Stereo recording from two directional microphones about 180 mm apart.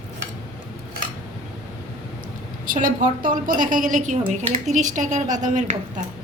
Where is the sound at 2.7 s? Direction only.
50° right (ahead or behind).